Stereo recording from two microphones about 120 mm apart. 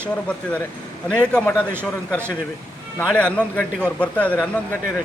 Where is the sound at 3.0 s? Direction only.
10° left (ahead or behind).